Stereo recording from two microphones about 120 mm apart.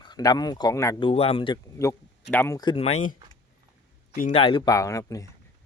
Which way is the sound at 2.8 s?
70° left (ahead or behind).